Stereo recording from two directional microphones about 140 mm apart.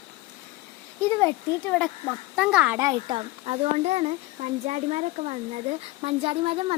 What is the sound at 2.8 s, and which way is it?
Speech, 30° right (ahead or behind).